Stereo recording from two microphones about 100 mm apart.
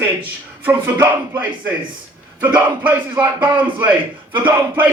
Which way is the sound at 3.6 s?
15° right (ahead or behind).